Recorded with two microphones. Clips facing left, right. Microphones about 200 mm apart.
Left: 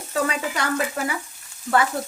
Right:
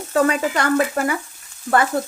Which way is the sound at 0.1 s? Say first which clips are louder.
Right 7 dB; 50° right (ahead or behind).